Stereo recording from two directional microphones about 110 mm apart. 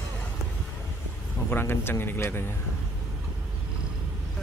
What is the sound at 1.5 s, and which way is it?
Speech, 20° left (ahead or behind).